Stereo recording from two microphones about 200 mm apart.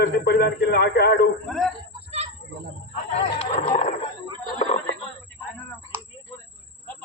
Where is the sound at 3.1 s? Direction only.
30° left (ahead or behind).